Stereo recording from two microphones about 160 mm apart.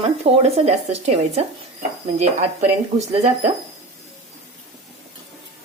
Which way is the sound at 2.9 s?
45° right (ahead or behind).